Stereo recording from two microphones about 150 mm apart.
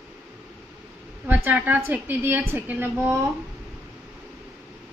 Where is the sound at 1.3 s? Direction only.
10° right (ahead or behind).